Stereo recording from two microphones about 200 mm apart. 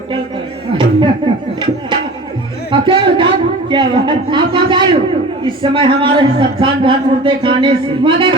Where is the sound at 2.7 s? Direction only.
25° right (ahead or behind).